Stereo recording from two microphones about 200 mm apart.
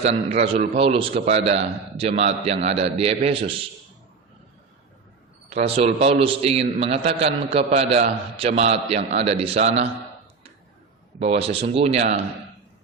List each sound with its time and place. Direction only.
0.0 s a man's voice: 30° right (ahead or behind)
5.5 s a man's voice: 30° right (ahead or behind)
11.2 s a man's voice: 30° right (ahead or behind)